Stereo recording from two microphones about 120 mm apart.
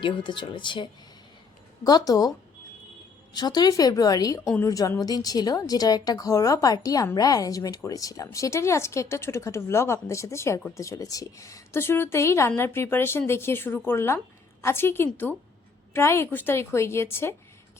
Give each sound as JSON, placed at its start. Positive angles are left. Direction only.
{"t": 0.0, "sound": "a woman's voice", "side_deg": 40}
{"t": 1.8, "sound": "a woman's voice", "side_deg": 30}
{"t": 3.3, "sound": "a woman's voice", "side_deg": 35}